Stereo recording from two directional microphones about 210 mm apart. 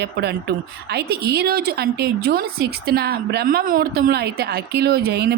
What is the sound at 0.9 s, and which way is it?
A woman's voice, 50° right (ahead or behind).